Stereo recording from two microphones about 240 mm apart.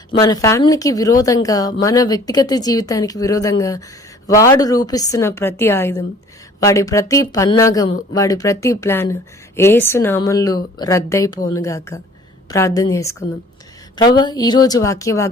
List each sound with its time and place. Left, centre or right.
0.1 s speech: centre